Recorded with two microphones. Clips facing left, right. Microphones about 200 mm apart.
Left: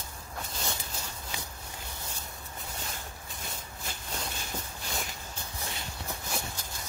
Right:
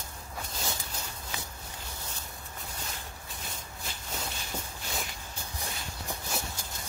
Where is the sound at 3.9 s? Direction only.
50° left (ahead or behind).